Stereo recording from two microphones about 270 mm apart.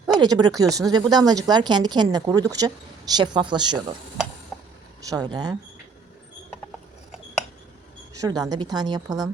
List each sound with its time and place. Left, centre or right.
0.1 s speech: centre
5.0 s speech: centre
8.1 s speech: centre